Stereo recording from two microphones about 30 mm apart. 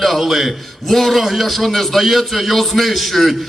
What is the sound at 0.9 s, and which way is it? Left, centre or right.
A man's voice, centre.